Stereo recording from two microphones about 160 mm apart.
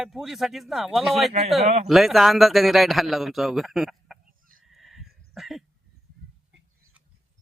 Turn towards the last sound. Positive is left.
turn(degrees=0)  # may be behind; listen again after turning